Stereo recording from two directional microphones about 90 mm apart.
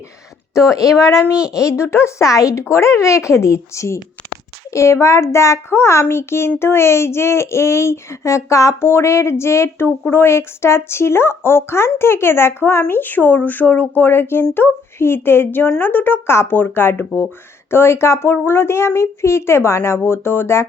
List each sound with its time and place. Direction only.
0.7 s speech: 40° left (ahead or behind)